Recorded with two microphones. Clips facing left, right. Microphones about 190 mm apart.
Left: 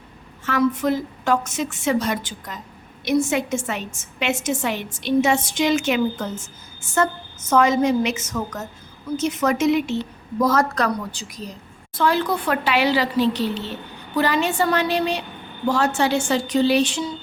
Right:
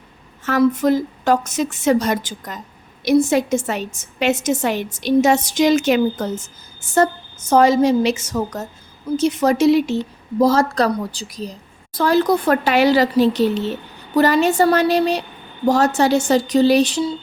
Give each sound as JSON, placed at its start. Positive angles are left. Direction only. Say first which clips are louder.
{"t": 0.4, "sound": "a woman's voice", "louder": "right 4 dB", "side_deg": -40}
{"t": 7.5, "sound": "a woman's voice", "louder": "right 4 dB", "side_deg": -35}